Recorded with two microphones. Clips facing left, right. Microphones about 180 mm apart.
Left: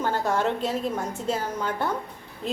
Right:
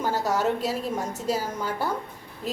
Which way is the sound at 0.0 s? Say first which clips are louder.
Even; 5° right (ahead or behind).